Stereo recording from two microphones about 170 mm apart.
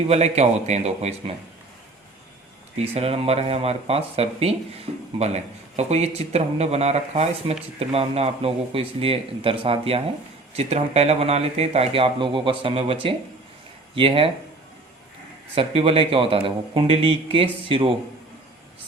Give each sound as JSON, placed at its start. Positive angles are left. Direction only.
{"t": 0.1, "sound": "speech", "side_deg": -40}
{"t": 2.7, "sound": "speech", "side_deg": -35}
{"t": 15.5, "sound": "speech", "side_deg": -35}